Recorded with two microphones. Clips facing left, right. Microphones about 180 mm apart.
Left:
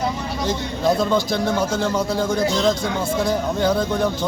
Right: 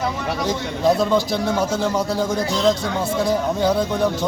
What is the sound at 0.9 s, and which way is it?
Speech, 5° right (ahead or behind).